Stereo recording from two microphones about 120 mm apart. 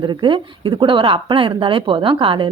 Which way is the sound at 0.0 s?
40° right (ahead or behind).